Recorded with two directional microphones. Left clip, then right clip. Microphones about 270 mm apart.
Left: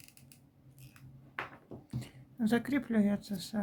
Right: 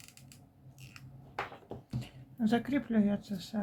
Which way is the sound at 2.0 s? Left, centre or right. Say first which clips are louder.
Right 1 dB; centre.